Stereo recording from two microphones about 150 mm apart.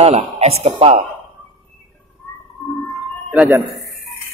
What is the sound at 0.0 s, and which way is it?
Speech, 45° right (ahead or behind).